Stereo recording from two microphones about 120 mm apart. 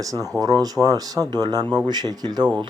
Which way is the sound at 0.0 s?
30° right (ahead or behind).